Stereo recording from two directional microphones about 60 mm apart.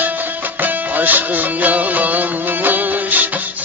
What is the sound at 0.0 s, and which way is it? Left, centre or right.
Music, right.